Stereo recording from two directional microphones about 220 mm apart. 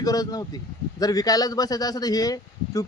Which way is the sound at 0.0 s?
15° left (ahead or behind).